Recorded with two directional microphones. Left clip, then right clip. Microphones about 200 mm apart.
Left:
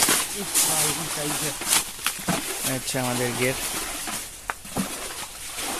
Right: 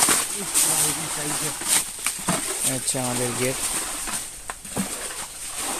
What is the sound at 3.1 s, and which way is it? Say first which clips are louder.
Speech: left 1 dB; centre (ahead or behind).